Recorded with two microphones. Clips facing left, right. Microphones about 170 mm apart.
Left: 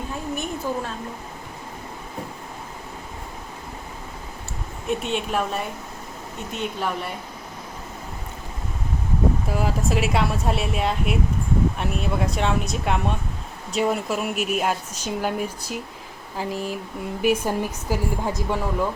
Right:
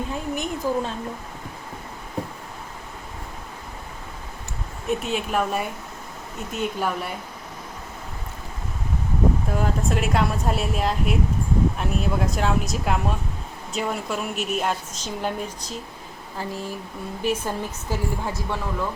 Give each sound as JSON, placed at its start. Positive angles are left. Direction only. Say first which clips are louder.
{"t": 0.3, "sound": "a woman's voice", "louder": "right 3 dB", "side_deg": -15}
{"t": 4.9, "sound": "speech", "louder": "even", "side_deg": 0}
{"t": 9.5, "sound": "a woman's voice", "louder": "even", "side_deg": 5}